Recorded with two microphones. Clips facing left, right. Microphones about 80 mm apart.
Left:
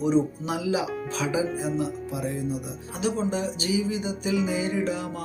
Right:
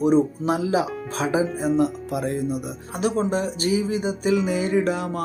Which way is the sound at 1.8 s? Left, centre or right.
Right.